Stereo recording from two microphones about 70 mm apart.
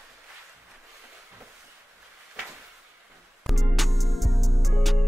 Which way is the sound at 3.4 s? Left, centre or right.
Centre.